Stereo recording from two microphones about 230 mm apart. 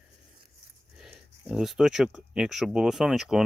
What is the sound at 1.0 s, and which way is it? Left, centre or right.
Speech, centre.